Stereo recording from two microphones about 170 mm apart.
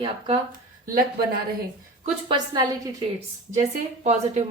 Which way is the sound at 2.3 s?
25° right (ahead or behind).